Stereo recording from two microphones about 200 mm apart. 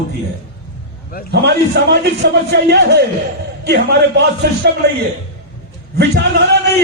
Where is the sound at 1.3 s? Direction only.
55° right (ahead or behind).